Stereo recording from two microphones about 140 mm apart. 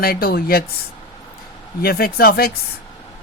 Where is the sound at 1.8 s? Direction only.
90° left.